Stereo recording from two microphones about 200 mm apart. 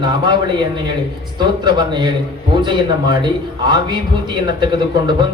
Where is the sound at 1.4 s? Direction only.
20° right (ahead or behind).